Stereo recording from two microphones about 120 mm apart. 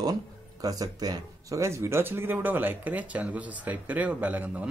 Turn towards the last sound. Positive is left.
turn(degrees=-15)  # may be behind; listen again after turning